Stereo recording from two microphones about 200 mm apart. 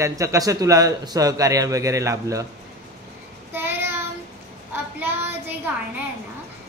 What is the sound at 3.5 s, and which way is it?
Child singing, 10° right (ahead or behind).